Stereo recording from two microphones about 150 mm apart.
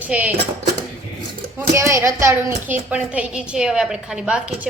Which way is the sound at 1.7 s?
20° right (ahead or behind).